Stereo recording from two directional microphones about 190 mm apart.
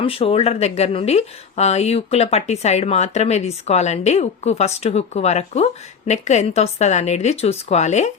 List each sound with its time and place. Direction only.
0.0 s speech: 30° left (ahead or behind)